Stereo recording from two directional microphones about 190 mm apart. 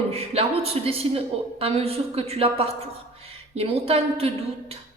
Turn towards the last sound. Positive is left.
turn(degrees=-30)  # may be behind; listen again after turning